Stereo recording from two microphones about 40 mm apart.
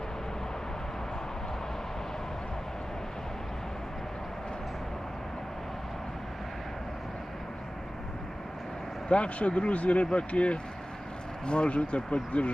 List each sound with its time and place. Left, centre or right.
9.0 s speech: left